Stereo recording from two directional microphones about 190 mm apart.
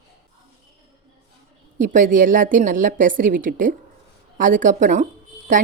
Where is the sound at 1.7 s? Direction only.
45° right (ahead or behind).